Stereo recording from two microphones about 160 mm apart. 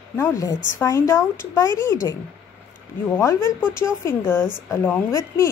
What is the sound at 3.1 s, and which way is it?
A woman's voice, 15° left (ahead or behind).